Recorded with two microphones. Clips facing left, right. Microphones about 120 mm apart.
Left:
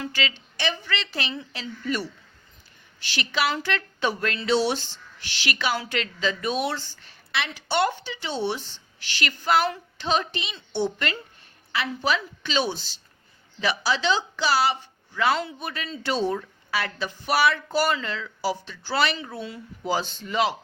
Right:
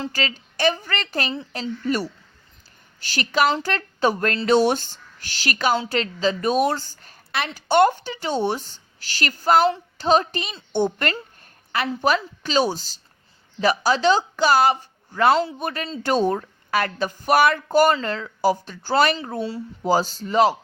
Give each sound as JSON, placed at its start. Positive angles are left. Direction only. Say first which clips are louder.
{"t": 0.1, "sound": "a woman's voice", "louder": "right 2 dB", "side_deg": -40}
{"t": 9.6, "sound": "a sound", "louder": "right 7 dB", "side_deg": -30}
{"t": 10.1, "sound": "a woman's voice", "louder": "right 6 dB", "side_deg": -40}